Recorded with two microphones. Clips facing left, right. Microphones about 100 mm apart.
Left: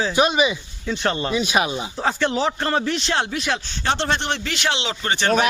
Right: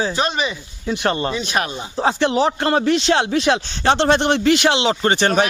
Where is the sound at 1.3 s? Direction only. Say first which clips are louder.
Left 1 dB; 5° left (ahead or behind).